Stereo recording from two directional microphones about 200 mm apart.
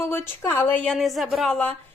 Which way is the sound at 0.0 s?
10° left (ahead or behind).